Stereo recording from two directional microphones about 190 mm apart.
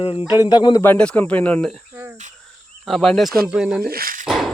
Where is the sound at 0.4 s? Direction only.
25° left (ahead or behind); by 1.8 s 5° left (ahead or behind).